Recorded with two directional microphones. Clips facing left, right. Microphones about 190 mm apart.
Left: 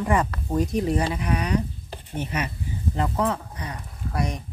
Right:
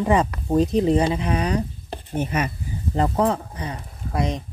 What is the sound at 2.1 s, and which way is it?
Speech, 50° right (ahead or behind).